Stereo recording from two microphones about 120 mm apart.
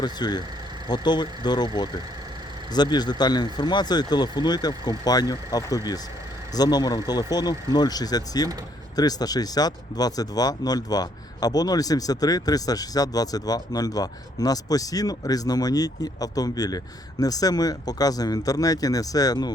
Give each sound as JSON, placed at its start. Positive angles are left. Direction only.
{"t": 0.0, "sound": "speech", "side_deg": 35}